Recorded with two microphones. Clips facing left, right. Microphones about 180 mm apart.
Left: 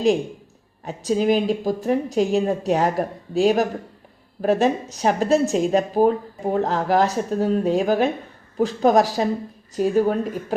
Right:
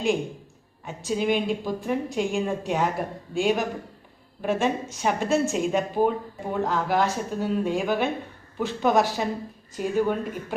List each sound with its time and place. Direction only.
0.9 s speech: 35° left (ahead or behind)